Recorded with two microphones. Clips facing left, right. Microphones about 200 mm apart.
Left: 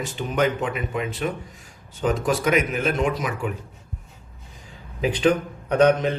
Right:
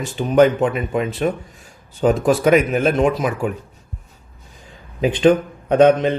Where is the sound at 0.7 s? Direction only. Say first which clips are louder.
Right 6 dB; 40° right (ahead or behind).